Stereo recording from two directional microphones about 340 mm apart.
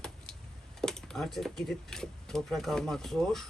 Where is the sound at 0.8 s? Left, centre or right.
Centre.